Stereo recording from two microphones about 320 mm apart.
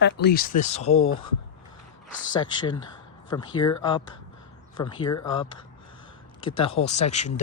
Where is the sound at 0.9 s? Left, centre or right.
Left.